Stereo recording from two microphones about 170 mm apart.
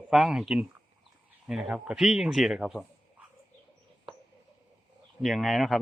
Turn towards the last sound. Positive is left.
turn(degrees=0)  # may be behind; listen again after turning